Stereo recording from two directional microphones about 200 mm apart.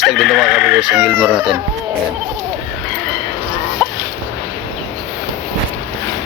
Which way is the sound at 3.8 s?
5° left (ahead or behind).